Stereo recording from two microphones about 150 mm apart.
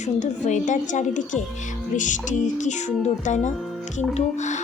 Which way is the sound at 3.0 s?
55° left (ahead or behind).